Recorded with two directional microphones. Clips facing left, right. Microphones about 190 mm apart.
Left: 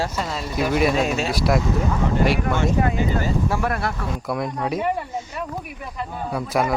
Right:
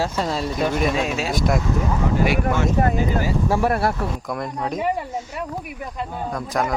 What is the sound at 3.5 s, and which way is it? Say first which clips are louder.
Speech: right 4 dB; 30° right (ahead or behind).